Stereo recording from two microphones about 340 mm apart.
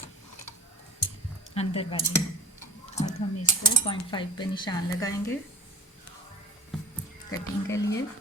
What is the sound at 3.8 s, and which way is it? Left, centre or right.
Speech, centre.